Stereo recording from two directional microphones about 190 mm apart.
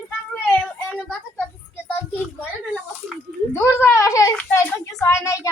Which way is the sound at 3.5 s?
10° left (ahead or behind).